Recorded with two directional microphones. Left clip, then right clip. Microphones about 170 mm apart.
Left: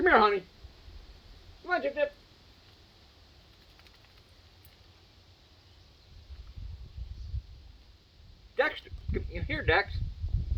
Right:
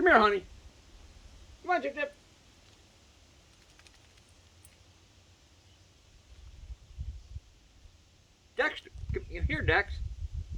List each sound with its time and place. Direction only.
0.0 s speech: 20° right (ahead or behind)
1.6 s speech: 20° right (ahead or behind)
8.5 s a sound: 15° right (ahead or behind)